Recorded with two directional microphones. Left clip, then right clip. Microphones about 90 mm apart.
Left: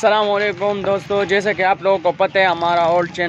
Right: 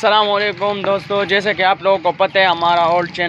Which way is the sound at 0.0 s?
45° left (ahead or behind).